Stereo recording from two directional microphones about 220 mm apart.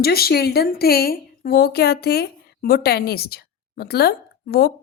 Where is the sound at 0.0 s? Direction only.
45° left (ahead or behind).